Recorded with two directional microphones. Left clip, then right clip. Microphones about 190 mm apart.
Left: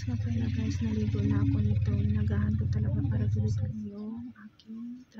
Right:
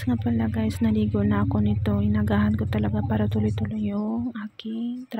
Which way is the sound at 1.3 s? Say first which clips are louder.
Right 7 dB; 45° right (ahead or behind).